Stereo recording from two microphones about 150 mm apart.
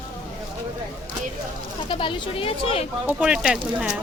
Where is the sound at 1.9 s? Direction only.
35° left (ahead or behind).